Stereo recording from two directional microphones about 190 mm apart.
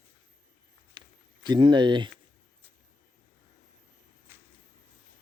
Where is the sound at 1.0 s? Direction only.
25° right (ahead or behind).